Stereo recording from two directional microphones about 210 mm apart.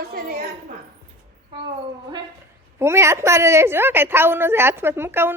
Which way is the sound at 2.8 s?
10° right (ahead or behind).